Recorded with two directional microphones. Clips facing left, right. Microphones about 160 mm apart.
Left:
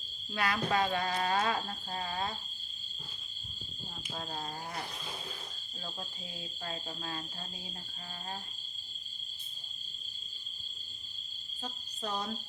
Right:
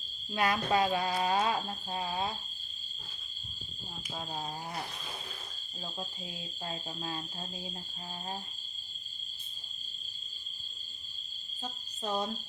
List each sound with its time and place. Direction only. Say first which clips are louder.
0.3 s speech: right 2 dB; 20° right (ahead or behind)
4.1 s speech: right 1 dB; 15° right (ahead or behind)
6.7 s speech: right 2 dB; 20° right (ahead or behind)
12.0 s speech: right 4 dB; 20° right (ahead or behind)